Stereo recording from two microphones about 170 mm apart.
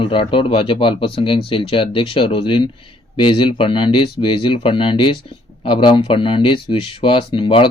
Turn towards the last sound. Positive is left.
turn(degrees=30)  # may be behind; listen again after turning